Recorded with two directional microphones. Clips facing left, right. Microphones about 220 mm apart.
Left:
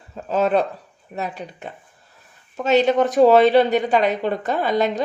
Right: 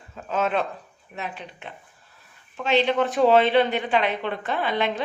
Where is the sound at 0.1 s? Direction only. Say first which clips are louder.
Left 6 dB; 35° left (ahead or behind).